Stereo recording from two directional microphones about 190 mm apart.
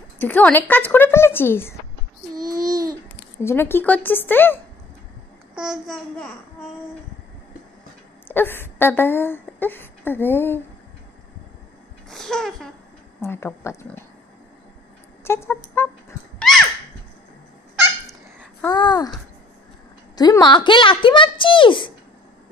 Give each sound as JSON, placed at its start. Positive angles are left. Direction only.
{"t": 0.2, "sound": "a woman's voice", "side_deg": 10}
{"t": 2.4, "sound": "babbling", "side_deg": -20}
{"t": 3.4, "sound": "a woman's voice", "side_deg": 10}
{"t": 5.5, "sound": "babbling", "side_deg": -5}
{"t": 8.3, "sound": "speech", "side_deg": 10}
{"t": 12.1, "sound": "a woman's voice", "side_deg": 0}
{"t": 15.2, "sound": "a woman's voice", "side_deg": 15}
{"t": 16.3, "sound": "dog", "side_deg": 0}
{"t": 18.7, "sound": "speech", "side_deg": 20}
{"t": 20.2, "sound": "speech", "side_deg": 20}